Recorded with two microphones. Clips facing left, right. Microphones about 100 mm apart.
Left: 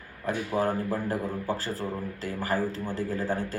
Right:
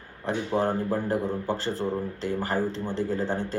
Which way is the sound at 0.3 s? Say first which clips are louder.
Right 2 dB; 25° right (ahead or behind).